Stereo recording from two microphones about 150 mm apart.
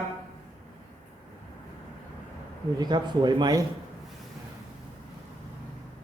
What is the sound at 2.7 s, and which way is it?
Speech, 25° right (ahead or behind).